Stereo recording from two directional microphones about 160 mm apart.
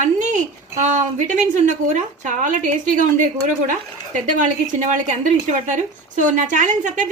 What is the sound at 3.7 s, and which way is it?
A woman's voice, 50° right (ahead or behind).